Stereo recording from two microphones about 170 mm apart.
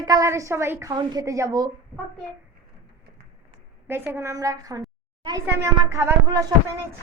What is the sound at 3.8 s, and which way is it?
Speech, 15° right (ahead or behind).